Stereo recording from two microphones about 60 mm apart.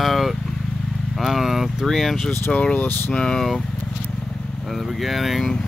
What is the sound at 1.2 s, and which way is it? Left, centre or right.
Speech, centre.